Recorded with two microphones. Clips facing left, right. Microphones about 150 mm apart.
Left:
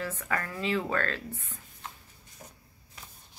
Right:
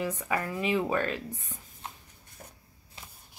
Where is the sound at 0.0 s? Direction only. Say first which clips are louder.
Right 3 dB; 15° right (ahead or behind).